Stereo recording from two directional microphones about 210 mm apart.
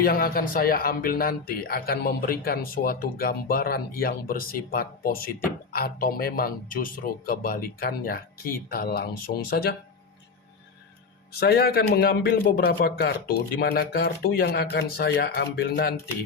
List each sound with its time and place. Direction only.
0.0 s speech: 45° left (ahead or behind)
11.3 s speech: 50° left (ahead or behind)